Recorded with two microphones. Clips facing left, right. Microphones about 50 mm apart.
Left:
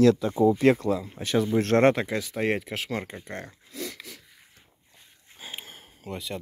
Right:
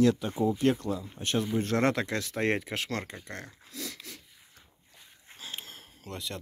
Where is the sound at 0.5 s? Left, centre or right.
Left.